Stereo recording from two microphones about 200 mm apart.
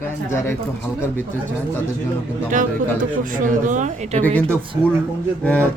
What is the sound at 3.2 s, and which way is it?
Speech, 40° right (ahead or behind).